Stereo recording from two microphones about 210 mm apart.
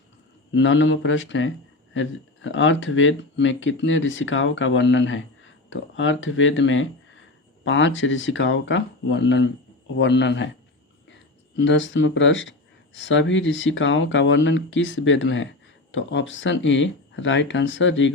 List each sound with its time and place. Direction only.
0.5 s speech: 60° left (ahead or behind)
11.5 s speech: 60° left (ahead or behind)